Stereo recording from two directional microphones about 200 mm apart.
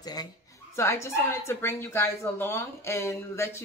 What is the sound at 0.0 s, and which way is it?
A woman's voice, 20° left (ahead or behind).